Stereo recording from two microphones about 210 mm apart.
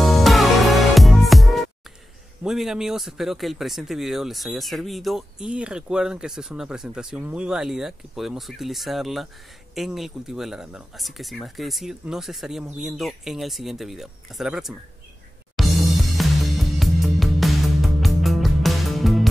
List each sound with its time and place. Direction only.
0.0 s music: centre (ahead or behind)
2.4 s speech: centre (ahead or behind)
15.5 s music: centre (ahead or behind)